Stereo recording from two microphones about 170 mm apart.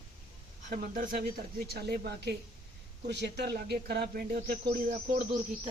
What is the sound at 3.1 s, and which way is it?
Speech, 80° right.